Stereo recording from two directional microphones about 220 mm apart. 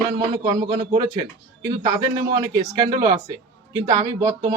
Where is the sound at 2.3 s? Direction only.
20° right (ahead or behind).